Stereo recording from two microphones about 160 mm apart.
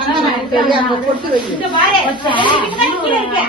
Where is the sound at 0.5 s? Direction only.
30° left (ahead or behind).